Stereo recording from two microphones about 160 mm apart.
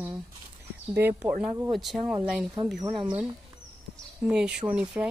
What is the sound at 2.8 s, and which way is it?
Speech, 30° right (ahead or behind).